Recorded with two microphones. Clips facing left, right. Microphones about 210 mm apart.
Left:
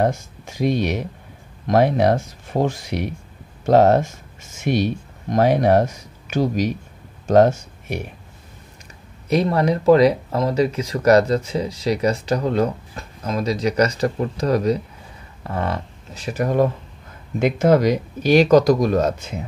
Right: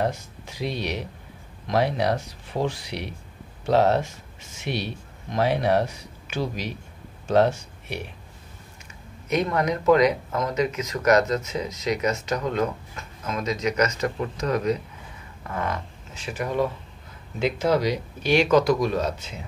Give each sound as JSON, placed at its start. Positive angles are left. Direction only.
{"t": 0.0, "sound": "speech", "side_deg": 50}
{"t": 9.3, "sound": "speech", "side_deg": 30}